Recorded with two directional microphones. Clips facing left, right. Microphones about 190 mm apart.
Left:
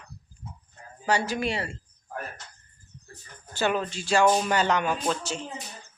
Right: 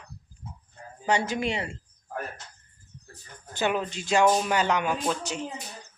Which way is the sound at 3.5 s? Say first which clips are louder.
Left 1 dB; 15° right (ahead or behind).